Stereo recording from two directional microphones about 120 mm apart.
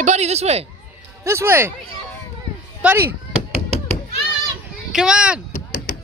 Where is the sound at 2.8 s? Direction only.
15° right (ahead or behind).